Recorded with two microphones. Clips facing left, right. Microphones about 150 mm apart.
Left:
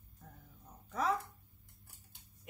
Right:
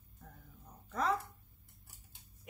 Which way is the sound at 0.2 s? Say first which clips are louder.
Right 1 dB; 5° left (ahead or behind).